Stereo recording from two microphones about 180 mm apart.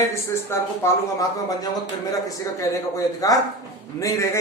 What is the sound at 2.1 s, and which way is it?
A man's voice, 20° left (ahead or behind).